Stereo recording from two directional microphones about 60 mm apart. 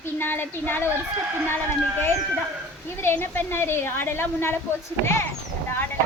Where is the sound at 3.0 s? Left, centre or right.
Left.